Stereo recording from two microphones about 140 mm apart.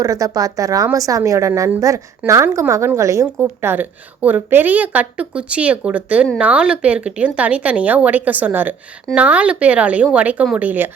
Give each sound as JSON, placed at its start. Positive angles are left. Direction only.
{"t": 0.0, "sound": "a woman's voice", "side_deg": -25}